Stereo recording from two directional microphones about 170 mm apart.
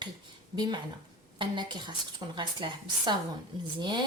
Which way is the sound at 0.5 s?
25° right (ahead or behind).